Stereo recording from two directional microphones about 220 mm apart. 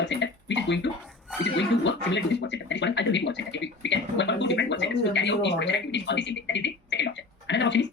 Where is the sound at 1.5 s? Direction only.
55° left (ahead or behind).